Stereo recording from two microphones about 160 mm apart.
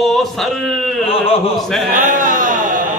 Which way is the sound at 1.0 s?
35° left (ahead or behind).